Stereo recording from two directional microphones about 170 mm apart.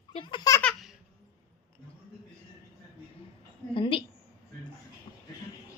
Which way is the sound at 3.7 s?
30° left (ahead or behind).